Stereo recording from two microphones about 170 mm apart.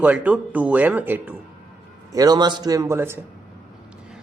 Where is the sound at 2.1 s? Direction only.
20° right (ahead or behind).